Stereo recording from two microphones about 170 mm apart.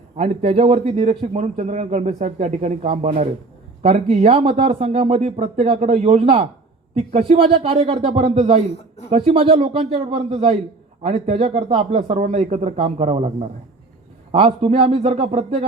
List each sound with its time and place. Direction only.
0.2 s a man's voice: 40° right (ahead or behind)